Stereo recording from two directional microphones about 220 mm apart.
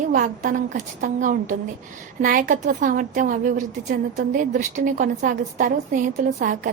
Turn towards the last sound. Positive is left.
turn(degrees=-35)  # may be behind; listen again after turning